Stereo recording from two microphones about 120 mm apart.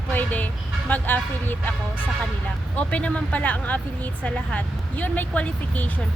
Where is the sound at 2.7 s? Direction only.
10° left (ahead or behind).